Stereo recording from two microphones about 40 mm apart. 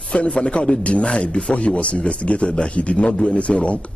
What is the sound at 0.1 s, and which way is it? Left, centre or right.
A man's voice, left.